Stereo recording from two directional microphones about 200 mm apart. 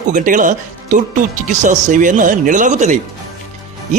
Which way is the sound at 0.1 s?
40° right (ahead or behind).